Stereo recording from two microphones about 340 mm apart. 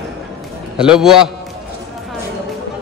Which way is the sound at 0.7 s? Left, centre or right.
Centre.